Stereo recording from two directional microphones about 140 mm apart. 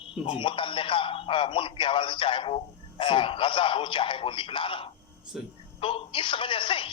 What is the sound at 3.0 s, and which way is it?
Speech, 35° left (ahead or behind).